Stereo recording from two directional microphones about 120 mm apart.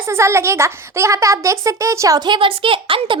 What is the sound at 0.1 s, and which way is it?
Speech, 20° right (ahead or behind).